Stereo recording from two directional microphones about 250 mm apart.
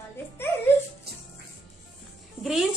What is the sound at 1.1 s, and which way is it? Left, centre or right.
Music, right.